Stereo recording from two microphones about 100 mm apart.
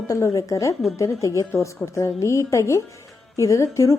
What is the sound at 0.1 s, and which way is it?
A woman's voice, 30° left (ahead or behind).